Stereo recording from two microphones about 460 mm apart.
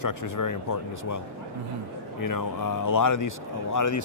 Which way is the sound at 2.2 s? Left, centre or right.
Left.